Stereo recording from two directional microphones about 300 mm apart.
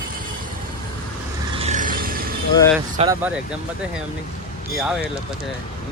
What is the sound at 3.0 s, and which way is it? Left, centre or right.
Speech, right.